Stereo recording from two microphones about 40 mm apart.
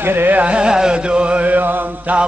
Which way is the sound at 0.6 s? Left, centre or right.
Right.